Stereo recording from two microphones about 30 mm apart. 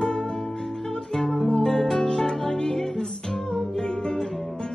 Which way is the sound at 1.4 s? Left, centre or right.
Centre.